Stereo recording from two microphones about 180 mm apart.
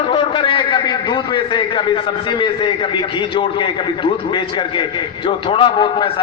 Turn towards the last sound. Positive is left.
turn(degrees=30)  # may be behind; listen again after turning